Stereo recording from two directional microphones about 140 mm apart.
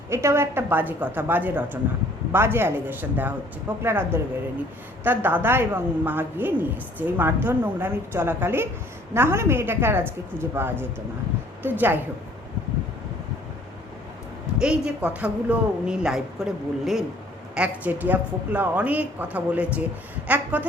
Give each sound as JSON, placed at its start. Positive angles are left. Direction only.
{"t": 0.1, "sound": "a woman's voice", "side_deg": -20}
{"t": 14.6, "sound": "a woman's voice", "side_deg": -5}